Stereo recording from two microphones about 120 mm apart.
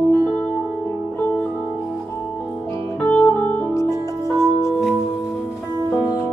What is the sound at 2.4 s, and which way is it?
Music, 20° left (ahead or behind).